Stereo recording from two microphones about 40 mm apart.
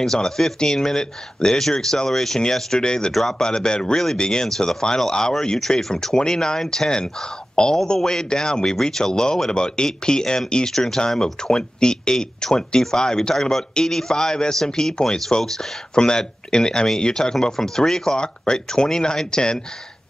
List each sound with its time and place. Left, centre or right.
0.0 s a man's voice: centre
2.8 s speech: centre
3.1 s a man's voice: centre
3.4 s a man's voice: centre